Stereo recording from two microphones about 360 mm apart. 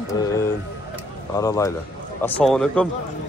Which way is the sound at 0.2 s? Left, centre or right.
Centre.